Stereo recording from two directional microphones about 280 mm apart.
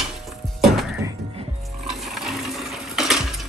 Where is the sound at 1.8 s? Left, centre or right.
Centre.